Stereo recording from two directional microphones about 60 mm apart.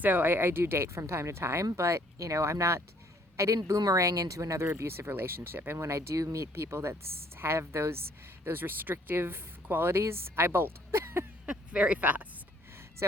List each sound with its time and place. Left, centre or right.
0.0 s speech: right
4.0 s speech: right
4.8 s speech: right
11.4 s speech: centre
13.0 s speech: right